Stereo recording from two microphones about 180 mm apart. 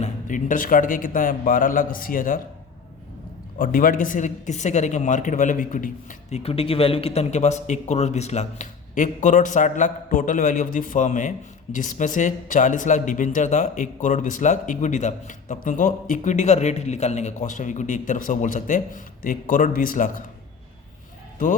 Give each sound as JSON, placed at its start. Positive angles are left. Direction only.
{"t": 0.0, "sound": "speech", "side_deg": 45}
{"t": 3.6, "sound": "speech", "side_deg": 50}